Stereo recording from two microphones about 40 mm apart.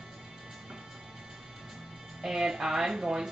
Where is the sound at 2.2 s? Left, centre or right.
Centre.